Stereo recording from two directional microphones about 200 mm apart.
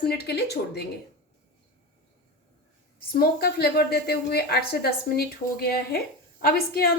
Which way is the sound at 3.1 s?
50° left (ahead or behind).